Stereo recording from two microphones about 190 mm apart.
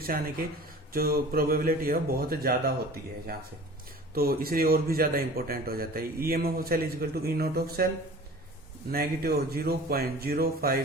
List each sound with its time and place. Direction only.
0.0 s a man's voice: 50° right (ahead or behind)
8.9 s a man's voice: 55° right (ahead or behind)